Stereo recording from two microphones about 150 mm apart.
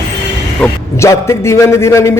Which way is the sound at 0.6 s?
20° left (ahead or behind).